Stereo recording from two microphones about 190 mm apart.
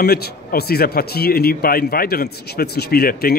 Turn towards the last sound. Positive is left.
turn(degrees=55)  # may be behind; listen again after turning